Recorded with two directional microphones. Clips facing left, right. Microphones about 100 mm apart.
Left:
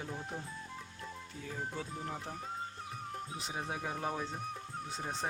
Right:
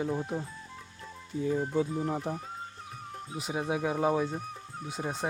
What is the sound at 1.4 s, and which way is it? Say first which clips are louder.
Speech: right 12 dB; 5° right (ahead or behind).